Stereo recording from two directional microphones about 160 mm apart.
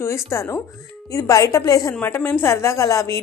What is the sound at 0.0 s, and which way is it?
A woman's voice, 15° left (ahead or behind).